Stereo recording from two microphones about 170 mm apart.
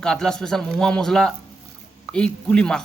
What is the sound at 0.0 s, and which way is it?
A man's voice, 5° left (ahead or behind).